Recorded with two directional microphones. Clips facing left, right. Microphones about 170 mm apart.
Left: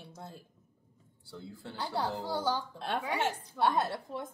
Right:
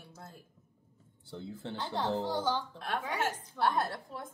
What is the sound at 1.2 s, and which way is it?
Speech, 20° right (ahead or behind).